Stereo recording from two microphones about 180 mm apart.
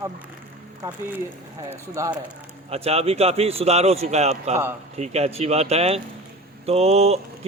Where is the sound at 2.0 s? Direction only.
15° right (ahead or behind).